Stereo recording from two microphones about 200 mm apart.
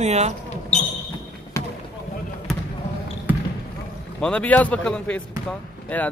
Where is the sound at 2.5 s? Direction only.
Centre (ahead or behind).